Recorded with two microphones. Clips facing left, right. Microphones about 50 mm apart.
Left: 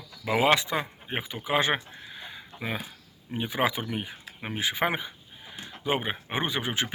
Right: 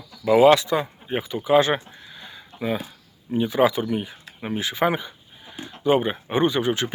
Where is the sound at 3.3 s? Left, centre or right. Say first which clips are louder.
Right 8 dB; centre.